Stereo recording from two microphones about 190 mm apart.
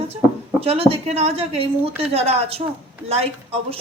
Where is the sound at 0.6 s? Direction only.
30° right (ahead or behind).